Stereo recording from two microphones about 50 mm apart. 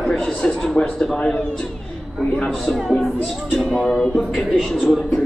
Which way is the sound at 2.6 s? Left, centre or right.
Centre.